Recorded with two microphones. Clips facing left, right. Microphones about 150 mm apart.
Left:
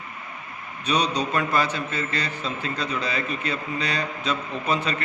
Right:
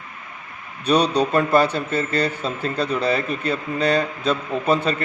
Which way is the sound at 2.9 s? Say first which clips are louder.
Right 6 dB; 35° right (ahead or behind).